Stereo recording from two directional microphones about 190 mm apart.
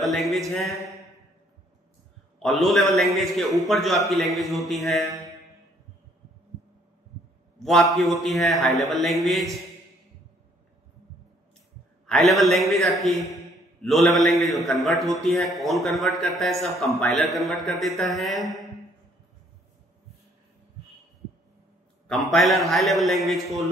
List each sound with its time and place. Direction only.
0.0 s a man's voice: centre (ahead or behind)
2.4 s a man's voice: centre (ahead or behind)
5.0 s mantra: 20° right (ahead or behind)
7.5 s a sound: centre (ahead or behind)
8.2 s a man's voice: centre (ahead or behind)
12.1 s a man's voice: centre (ahead or behind)
22.3 s a man's voice: centre (ahead or behind)